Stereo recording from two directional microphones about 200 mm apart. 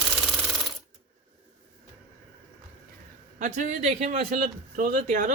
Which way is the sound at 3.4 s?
40° right (ahead or behind).